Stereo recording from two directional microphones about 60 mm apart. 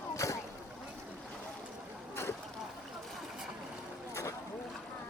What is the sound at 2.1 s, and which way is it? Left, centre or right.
Boat, left.